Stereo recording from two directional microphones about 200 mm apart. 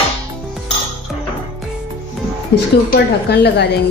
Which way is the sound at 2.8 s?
55° left (ahead or behind).